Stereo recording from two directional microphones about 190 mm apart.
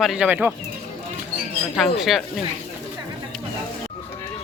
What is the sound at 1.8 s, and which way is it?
Speech, centre (ahead or behind).